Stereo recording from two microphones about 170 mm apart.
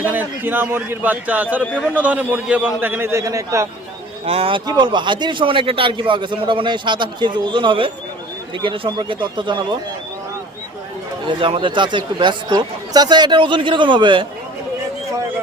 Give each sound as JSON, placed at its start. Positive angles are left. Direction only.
{"t": 0.0, "sound": "a man's voice", "side_deg": -10}
{"t": 4.3, "sound": "speech", "side_deg": -35}
{"t": 11.3, "sound": "speech", "side_deg": -30}